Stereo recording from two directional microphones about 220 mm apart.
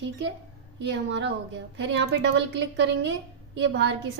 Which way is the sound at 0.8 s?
55° right (ahead or behind).